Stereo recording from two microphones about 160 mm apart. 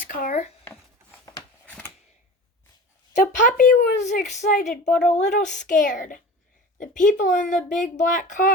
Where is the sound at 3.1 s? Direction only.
55° left (ahead or behind).